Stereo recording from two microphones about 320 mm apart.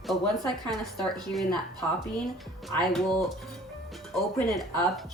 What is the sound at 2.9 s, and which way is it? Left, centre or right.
Speech, centre.